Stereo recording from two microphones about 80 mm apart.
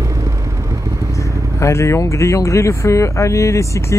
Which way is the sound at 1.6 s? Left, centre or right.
Left.